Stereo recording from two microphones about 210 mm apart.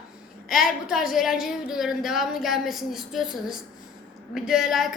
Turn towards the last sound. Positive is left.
turn(degrees=0)  # may be behind; listen again after turning